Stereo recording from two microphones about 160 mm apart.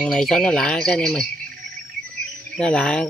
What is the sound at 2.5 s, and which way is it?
Speech, 5° left (ahead or behind).